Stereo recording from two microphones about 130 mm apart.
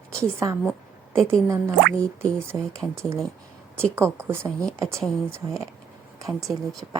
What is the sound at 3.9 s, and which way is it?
Speech, 20° right (ahead or behind).